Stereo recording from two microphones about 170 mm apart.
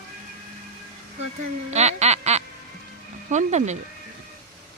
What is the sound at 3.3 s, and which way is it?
Speech, 45° right (ahead or behind).